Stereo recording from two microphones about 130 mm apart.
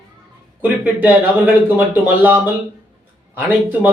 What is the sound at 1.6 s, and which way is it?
A man's voice, 15° right (ahead or behind).